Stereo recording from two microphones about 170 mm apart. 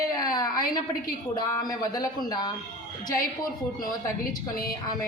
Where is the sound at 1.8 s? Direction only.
25° left (ahead or behind).